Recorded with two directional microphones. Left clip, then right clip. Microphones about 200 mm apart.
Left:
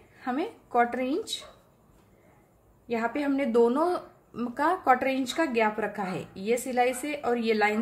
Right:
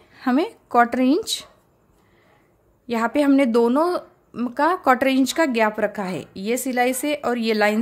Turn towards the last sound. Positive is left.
turn(degrees=-55)  # may be behind; listen again after turning